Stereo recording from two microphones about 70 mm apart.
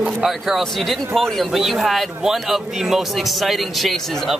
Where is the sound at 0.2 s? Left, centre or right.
Centre.